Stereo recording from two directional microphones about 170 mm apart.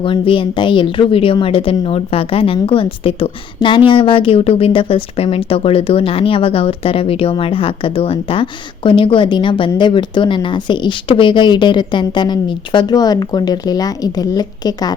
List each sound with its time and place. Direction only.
0.0 s speech: 30° left (ahead or behind)